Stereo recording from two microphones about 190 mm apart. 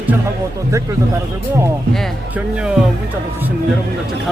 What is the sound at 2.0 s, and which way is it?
Speech, 5° right (ahead or behind).